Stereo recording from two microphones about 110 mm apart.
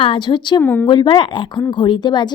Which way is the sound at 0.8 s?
45° left (ahead or behind).